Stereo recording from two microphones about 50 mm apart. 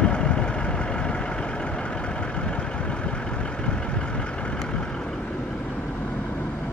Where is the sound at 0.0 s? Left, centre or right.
Centre.